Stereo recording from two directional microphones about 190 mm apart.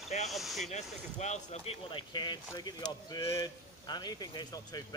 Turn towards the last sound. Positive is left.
turn(degrees=20)  # may be behind; listen again after turning